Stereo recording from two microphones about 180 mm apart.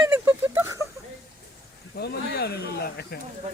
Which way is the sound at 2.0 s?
65° left (ahead or behind).